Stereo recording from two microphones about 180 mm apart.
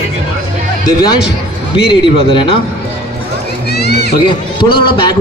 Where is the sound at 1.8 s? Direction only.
30° left (ahead or behind).